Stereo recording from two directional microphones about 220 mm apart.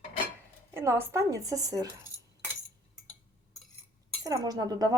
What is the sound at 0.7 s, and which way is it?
Speech, 10° right (ahead or behind).